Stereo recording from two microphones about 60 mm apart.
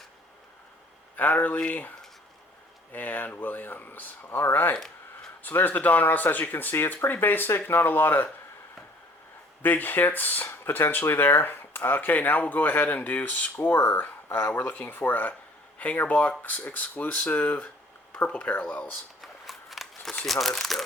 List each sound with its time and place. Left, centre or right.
1.1 s speech: left
2.9 s speech: left
9.6 s speech: left
19.2 s scissors: centre
20.2 s speech: centre